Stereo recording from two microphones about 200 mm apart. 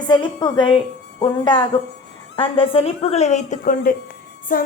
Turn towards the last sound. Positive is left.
turn(degrees=45)  # may be behind; listen again after turning